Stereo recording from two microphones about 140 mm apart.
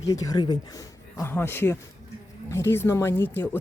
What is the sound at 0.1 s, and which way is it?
Speech, 25° left (ahead or behind).